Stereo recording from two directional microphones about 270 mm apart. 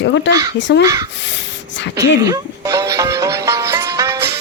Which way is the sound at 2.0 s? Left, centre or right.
Centre.